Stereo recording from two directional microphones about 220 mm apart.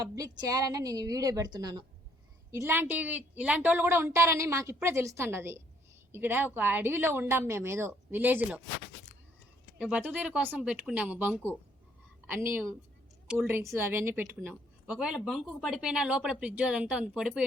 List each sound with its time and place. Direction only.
0.0 s a woman's voice: 15° right (ahead or behind)
9.7 s a woman's voice: 5° right (ahead or behind)